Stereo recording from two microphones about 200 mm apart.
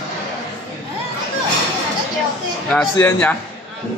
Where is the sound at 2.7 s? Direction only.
5° left (ahead or behind).